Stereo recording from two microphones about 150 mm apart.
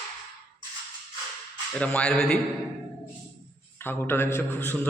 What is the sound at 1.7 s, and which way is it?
Speech, 5° left (ahead or behind).